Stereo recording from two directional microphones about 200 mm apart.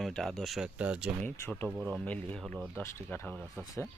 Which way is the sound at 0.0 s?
Centre (ahead or behind).